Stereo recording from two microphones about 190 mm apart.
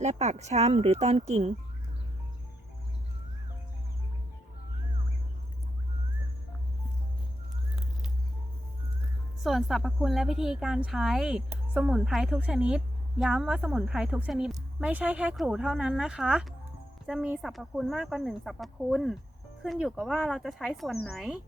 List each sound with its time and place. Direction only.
0.0 s speech: 35° right (ahead or behind)
9.4 s speech: centre (ahead or behind)